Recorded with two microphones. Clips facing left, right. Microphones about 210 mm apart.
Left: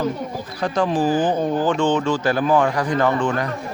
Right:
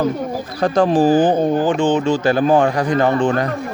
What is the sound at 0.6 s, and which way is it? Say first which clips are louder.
Speech: right 6 dB; 40° right (ahead or behind).